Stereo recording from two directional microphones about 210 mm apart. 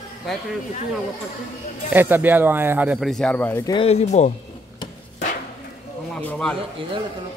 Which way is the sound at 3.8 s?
30° left (ahead or behind).